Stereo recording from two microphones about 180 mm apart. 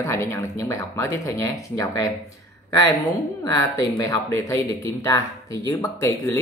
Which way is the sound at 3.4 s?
20° left (ahead or behind).